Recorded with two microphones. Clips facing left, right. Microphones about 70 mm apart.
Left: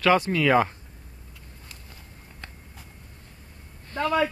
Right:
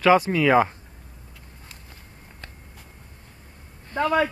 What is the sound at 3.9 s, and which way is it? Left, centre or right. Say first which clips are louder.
Speech: right 2 dB; centre.